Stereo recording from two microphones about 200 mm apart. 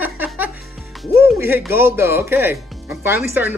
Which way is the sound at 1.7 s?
10° right (ahead or behind).